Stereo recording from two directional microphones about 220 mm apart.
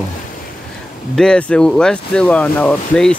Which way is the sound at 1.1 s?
5° left (ahead or behind).